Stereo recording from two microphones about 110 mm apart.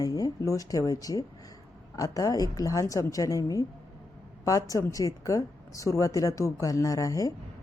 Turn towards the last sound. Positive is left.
turn(degrees=30)  # may be behind; listen again after turning